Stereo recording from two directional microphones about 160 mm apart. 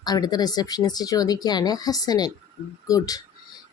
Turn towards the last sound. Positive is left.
turn(degrees=25)  # may be behind; listen again after turning